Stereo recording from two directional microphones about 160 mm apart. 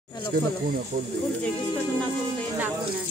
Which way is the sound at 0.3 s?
75° right (ahead or behind).